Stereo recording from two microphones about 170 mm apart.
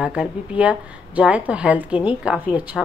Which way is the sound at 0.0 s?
5° right (ahead or behind).